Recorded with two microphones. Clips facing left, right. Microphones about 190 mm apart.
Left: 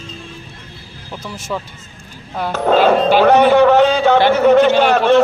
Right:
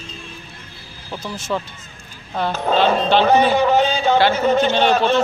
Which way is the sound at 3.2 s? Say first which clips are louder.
Left 6 dB; 70° left (ahead or behind).